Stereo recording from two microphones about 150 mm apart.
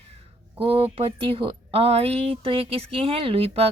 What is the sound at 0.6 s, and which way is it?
Speech, 40° right (ahead or behind).